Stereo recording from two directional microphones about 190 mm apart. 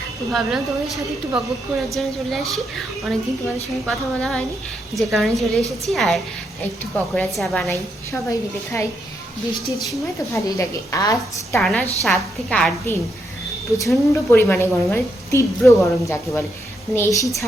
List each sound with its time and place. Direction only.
0.3 s a woman's voice: centre (ahead or behind)
8.3 s a woman's voice: 15° left (ahead or behind)
9.6 s a woman's voice: centre (ahead or behind)
10.3 s a woman's voice: 15° left (ahead or behind)
11.6 s a woman's voice: 5° left (ahead or behind)